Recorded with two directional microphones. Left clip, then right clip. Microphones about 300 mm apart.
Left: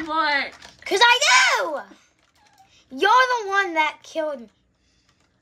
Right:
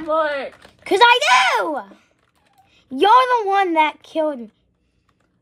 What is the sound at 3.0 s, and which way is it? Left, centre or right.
A woman's voice, centre.